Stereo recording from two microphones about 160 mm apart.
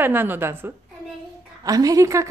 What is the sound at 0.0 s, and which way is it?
A woman's voice, 10° right (ahead or behind).